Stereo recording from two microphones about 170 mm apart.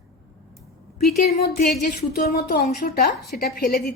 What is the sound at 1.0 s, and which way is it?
Speech, 65° left (ahead or behind).